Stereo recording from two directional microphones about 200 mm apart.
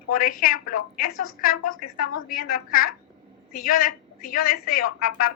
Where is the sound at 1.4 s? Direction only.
45° left (ahead or behind).